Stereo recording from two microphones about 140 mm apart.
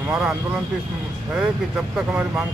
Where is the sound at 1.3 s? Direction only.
10° right (ahead or behind).